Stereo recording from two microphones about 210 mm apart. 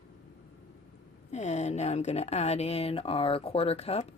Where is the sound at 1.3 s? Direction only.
30° left (ahead or behind).